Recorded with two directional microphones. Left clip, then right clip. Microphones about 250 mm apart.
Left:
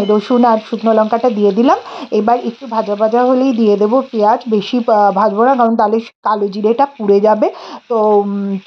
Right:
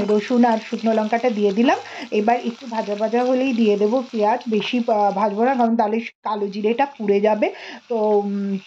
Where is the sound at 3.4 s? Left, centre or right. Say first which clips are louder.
Left 6 dB; centre.